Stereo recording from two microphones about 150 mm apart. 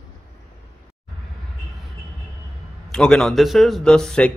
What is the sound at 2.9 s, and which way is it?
A man's voice, 5° left (ahead or behind).